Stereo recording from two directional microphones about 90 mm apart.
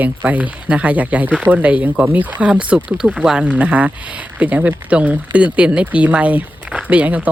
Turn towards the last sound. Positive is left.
turn(degrees=-15)  # may be behind; listen again after turning